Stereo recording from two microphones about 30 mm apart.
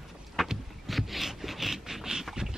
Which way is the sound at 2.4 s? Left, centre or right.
Right.